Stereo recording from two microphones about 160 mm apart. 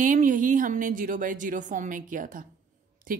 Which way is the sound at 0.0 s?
55° right (ahead or behind).